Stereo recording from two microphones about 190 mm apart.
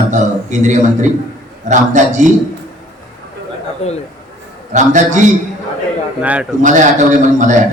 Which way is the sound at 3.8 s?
35° left (ahead or behind).